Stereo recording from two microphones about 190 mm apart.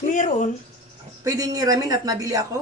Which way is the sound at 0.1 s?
40° left (ahead or behind).